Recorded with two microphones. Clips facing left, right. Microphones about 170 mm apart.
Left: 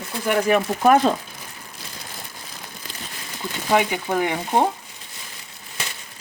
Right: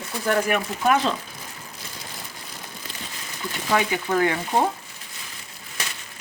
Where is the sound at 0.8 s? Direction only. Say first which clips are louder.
Left 5 dB; 45° left (ahead or behind).